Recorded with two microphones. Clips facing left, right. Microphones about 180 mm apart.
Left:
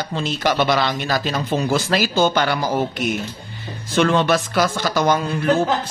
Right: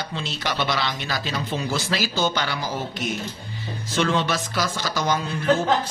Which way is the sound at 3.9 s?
60° left (ahead or behind).